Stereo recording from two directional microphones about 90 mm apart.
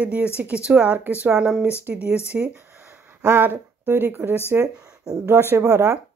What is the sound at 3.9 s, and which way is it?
Speech, 25° right (ahead or behind).